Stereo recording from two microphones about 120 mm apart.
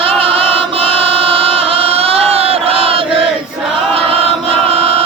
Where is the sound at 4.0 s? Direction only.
55° right (ahead or behind).